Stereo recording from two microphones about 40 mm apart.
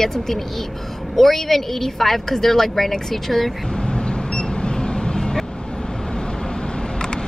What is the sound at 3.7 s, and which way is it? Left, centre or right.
Vehicle, centre.